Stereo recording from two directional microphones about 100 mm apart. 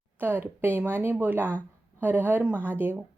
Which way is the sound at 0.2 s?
20° right (ahead or behind).